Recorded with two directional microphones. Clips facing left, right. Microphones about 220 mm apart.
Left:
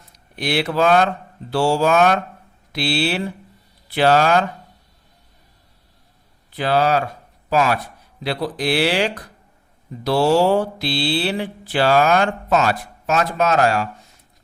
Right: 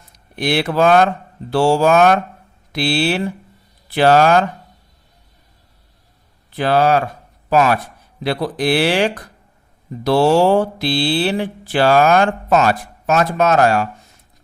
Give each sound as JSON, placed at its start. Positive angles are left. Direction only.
{"t": 0.3, "sound": "mantra", "side_deg": -50}
{"t": 6.6, "sound": "mantra", "side_deg": -50}
{"t": 8.2, "sound": "mantra", "side_deg": -50}